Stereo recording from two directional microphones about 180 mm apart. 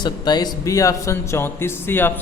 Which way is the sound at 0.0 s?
25° left (ahead or behind).